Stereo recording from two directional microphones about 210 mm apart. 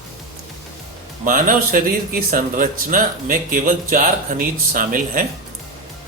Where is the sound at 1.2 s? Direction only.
40° right (ahead or behind).